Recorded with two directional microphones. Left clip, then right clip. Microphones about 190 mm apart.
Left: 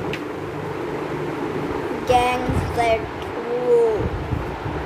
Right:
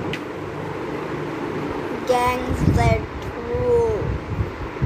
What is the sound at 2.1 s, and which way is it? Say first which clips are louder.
Music: left 2 dB; 5° right (ahead or behind).